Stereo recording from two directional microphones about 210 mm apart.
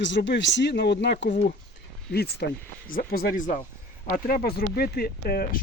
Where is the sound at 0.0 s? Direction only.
60° left (ahead or behind).